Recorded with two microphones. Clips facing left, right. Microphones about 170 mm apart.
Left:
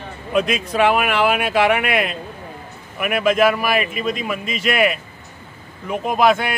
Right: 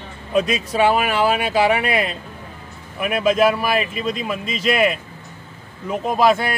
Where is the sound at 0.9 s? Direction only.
30° right (ahead or behind).